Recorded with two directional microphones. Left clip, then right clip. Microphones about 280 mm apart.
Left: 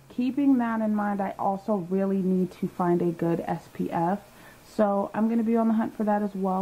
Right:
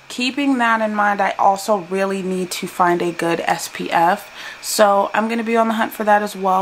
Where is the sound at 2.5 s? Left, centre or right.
Centre.